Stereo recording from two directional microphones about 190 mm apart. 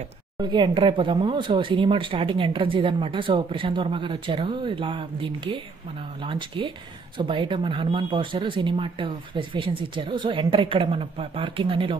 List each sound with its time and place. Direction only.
0.4 s speech: 25° right (ahead or behind)